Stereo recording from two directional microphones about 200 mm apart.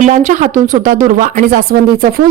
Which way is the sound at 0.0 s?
40° right (ahead or behind).